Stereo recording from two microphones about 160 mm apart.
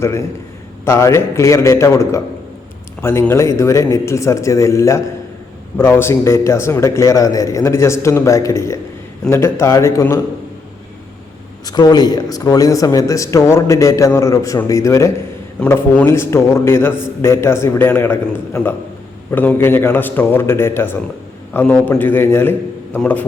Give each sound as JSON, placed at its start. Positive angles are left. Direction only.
{"t": 0.0, "sound": "a man's voice", "side_deg": 15}
{"t": 11.6, "sound": "a man's voice", "side_deg": 25}